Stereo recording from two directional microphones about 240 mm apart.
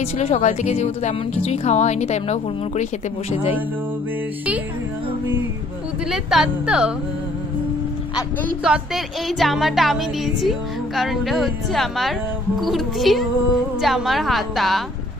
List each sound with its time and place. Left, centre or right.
0.0 s speech: left
6.1 s music: centre
8.6 s music: centre